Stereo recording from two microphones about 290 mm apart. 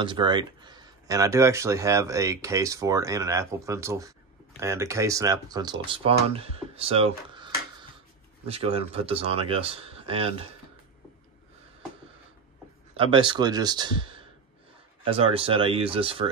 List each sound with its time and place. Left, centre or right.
0.0 s speech: centre
12.9 s speech: centre